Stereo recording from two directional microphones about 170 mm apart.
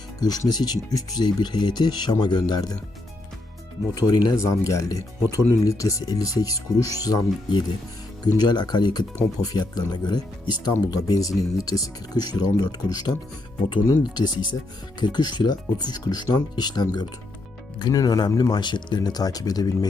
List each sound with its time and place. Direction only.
0.2 s speech: 25° left (ahead or behind)
3.9 s speech: 25° left (ahead or behind)